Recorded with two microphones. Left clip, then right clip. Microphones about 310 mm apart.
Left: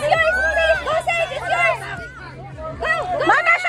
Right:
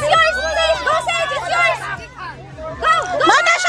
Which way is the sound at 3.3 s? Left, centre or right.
Centre.